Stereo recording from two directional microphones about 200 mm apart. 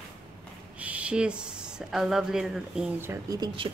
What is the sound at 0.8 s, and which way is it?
Speech, 5° right (ahead or behind).